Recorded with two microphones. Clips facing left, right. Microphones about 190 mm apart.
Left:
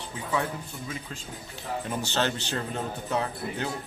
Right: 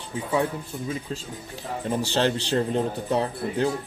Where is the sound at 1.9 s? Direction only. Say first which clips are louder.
Right 6 dB; 35° right (ahead or behind).